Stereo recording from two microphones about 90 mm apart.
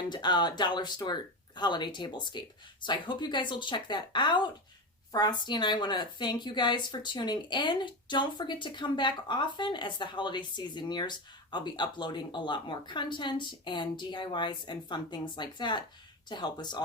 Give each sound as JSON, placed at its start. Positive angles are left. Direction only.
{"t": 0.1, "sound": "a woman's voice", "side_deg": 55}